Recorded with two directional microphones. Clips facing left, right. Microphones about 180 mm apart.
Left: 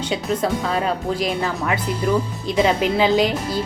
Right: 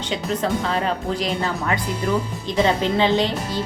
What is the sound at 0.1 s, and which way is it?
A woman's voice, 5° left (ahead or behind).